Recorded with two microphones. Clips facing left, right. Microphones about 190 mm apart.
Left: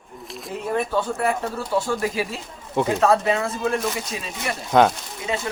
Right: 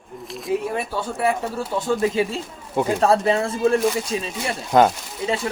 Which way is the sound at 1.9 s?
25° right (ahead or behind).